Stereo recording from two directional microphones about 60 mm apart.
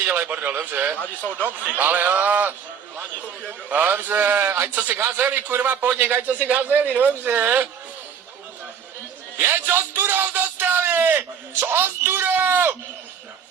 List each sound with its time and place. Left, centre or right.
0.0 s speech: right
0.9 s speech: left
1.4 s a man's voice: right
4.8 s a man's voice: right
9.4 s speech: right